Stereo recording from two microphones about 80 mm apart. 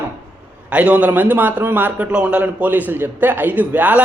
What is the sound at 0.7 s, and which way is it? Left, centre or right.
A man's voice, centre.